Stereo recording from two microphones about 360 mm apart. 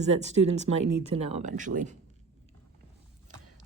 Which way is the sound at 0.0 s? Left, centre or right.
Centre.